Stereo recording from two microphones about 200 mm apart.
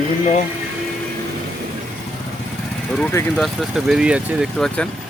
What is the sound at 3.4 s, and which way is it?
Speech, centre (ahead or behind).